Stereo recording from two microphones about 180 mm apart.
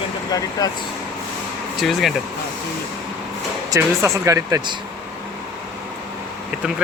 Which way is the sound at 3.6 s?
20° right (ahead or behind).